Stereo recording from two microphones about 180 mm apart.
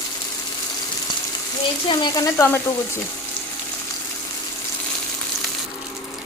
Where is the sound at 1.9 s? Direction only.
25° left (ahead or behind).